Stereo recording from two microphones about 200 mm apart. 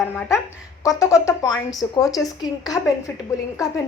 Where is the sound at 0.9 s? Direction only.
15° left (ahead or behind).